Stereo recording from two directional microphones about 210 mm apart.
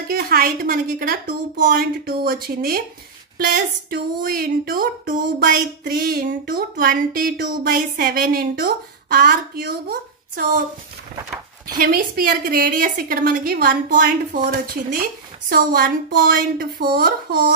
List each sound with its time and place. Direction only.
0.1 s speech: 45° right (ahead or behind)
11.7 s speech: 45° right (ahead or behind)